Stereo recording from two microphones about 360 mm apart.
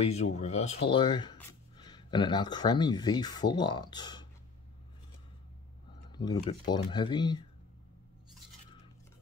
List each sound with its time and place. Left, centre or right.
0.0 s speech: centre
6.1 s speech: centre